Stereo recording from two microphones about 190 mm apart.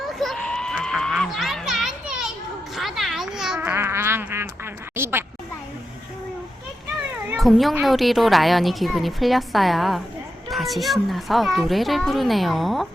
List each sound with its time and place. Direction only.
0.1 s children playing: centre (ahead or behind)
2.7 s a sound: centre (ahead or behind)
7.3 s speech: centre (ahead or behind)